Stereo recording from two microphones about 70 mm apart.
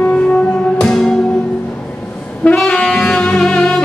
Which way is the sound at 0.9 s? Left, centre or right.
Centre.